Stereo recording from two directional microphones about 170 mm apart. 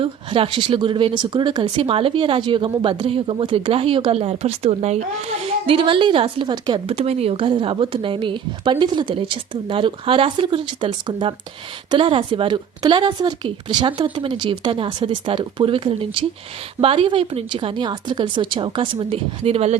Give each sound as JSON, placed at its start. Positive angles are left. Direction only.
{"t": 0.0, "sound": "a woman's voice", "side_deg": -30}